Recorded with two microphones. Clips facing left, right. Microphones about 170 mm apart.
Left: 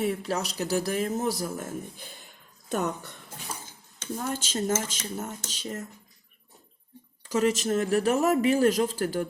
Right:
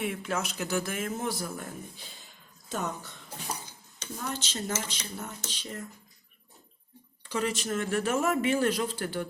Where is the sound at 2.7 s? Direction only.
60° left (ahead or behind).